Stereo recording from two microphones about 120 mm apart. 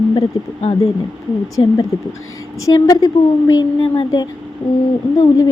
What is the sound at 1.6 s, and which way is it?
A woman's voice, 45° left (ahead or behind).